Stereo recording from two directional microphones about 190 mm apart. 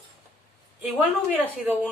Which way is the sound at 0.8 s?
10° right (ahead or behind).